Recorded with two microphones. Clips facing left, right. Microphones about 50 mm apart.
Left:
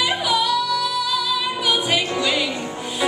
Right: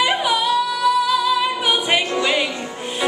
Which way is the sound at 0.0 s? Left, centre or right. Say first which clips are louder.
Right 2 dB; centre.